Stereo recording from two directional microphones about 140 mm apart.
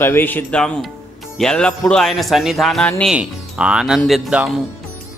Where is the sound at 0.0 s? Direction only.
15° left (ahead or behind).